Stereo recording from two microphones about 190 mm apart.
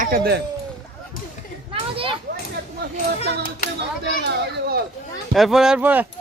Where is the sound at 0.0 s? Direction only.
50° right (ahead or behind).